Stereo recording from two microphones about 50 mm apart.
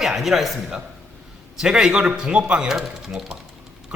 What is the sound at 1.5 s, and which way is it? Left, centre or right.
A man's voice, centre.